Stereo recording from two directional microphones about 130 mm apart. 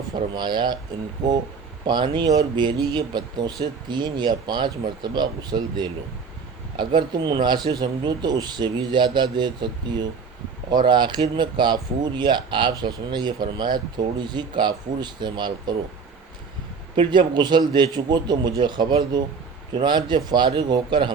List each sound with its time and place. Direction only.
0.3 s speech: 35° right (ahead or behind)
16.9 s speech: 35° right (ahead or behind)